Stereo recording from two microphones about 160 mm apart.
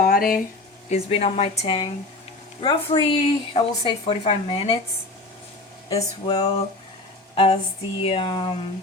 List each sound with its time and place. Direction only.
0.0 s a sound: 65° left (ahead or behind)
0.9 s a woman's voice: 40° left (ahead or behind)
5.9 s a woman's voice: 35° left (ahead or behind)